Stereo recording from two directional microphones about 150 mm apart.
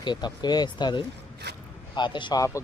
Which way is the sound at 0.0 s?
30° left (ahead or behind).